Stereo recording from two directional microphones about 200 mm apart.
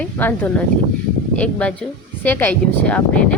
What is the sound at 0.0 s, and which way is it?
Speech, 10° left (ahead or behind).